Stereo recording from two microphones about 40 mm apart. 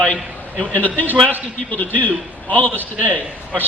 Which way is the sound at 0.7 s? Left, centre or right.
Left.